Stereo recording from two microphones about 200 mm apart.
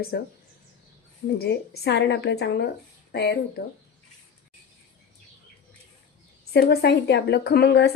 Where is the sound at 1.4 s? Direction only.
55° left (ahead or behind).